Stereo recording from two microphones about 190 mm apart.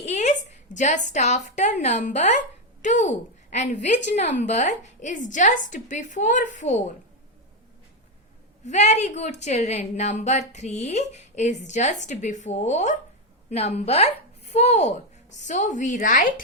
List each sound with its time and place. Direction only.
0.0 s a woman's voice: 35° left (ahead or behind)
8.6 s a woman's voice: 35° left (ahead or behind)